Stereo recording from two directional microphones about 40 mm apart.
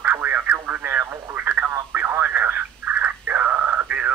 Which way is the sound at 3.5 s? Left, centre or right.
Right.